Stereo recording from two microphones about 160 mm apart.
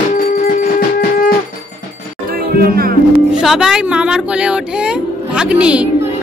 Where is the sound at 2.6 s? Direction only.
70° right (ahead or behind).